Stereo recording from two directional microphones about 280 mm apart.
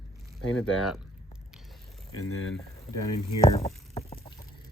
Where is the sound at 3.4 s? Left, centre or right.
Left.